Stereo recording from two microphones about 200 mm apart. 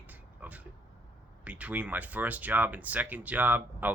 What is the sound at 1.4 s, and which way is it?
Speech, 5° right (ahead or behind).